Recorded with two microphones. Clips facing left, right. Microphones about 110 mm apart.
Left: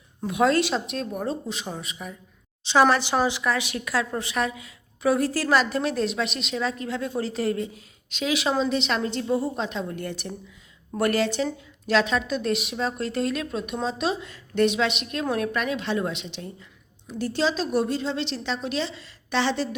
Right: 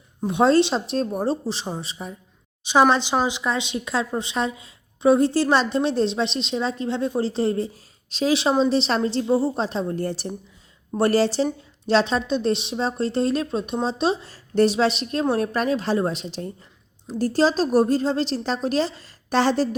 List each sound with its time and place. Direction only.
0.2 s a woman's voice: 30° right (ahead or behind)
2.6 s a woman's voice: 15° right (ahead or behind); by 19.6 s 45° right (ahead or behind)